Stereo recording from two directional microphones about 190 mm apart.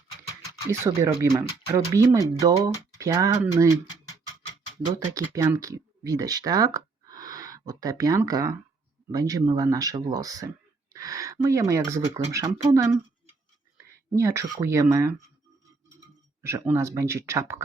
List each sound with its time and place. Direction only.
0.7 s speech: 15° right (ahead or behind)
4.9 s speech: 15° right (ahead or behind)
16.4 s speech: 15° right (ahead or behind)